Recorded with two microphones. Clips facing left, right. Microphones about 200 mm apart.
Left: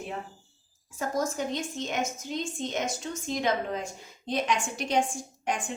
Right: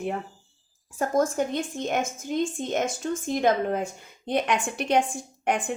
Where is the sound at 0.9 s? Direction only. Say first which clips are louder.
Right 6 dB; 55° right (ahead or behind).